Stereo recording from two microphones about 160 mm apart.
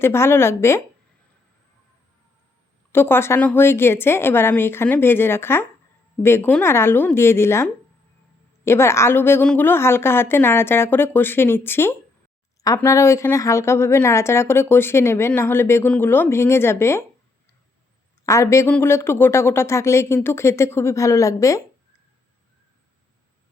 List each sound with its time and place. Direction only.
0.0 s a woman's voice: 15° left (ahead or behind)
2.9 s a woman's voice: 15° left (ahead or behind)
18.3 s a woman's voice: 20° left (ahead or behind)